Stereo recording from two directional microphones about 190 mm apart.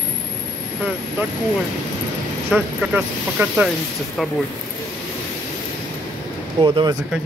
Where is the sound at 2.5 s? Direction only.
5° right (ahead or behind).